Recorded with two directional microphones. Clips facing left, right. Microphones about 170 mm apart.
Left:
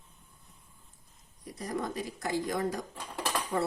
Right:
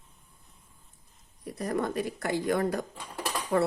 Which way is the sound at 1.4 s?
60° right (ahead or behind).